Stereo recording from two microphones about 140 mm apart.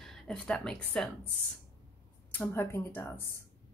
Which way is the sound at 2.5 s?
15° left (ahead or behind).